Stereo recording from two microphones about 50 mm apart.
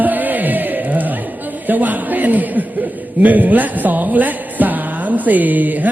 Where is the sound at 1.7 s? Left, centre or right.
Right.